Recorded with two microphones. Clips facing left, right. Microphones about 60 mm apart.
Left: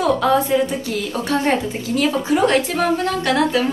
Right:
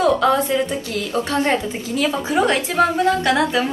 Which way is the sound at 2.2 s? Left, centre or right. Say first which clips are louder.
Left 2 dB; right.